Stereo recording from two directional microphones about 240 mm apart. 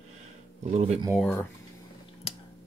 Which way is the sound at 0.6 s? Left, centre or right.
Right.